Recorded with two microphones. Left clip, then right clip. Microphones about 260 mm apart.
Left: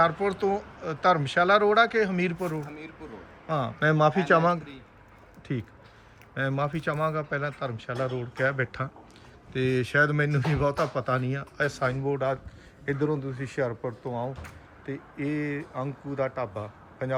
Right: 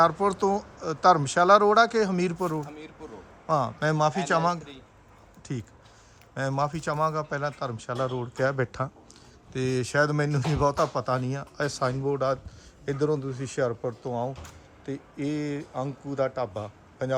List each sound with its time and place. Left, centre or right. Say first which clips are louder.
0.0 s a man's voice: right 2 dB; centre
14.8 s speech: even; right